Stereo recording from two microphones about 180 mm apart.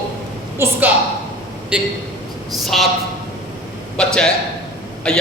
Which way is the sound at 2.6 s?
Centre (ahead or behind).